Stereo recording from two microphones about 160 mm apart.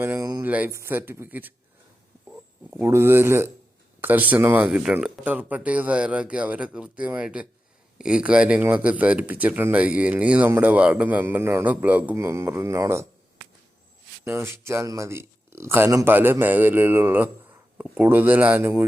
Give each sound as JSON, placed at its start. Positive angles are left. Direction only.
{"t": 0.0, "sound": "a sound", "side_deg": -15}
{"t": 0.4, "sound": "speech", "side_deg": -10}
{"t": 2.6, "sound": "speech", "side_deg": -15}
{"t": 14.3, "sound": "speech", "side_deg": -15}